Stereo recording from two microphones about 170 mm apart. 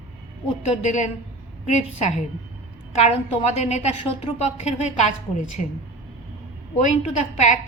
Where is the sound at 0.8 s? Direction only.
45° left (ahead or behind).